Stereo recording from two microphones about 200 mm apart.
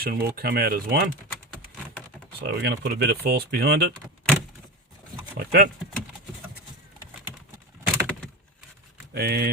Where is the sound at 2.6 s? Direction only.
55° right (ahead or behind).